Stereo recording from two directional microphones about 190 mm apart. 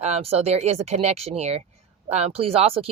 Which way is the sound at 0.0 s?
35° right (ahead or behind).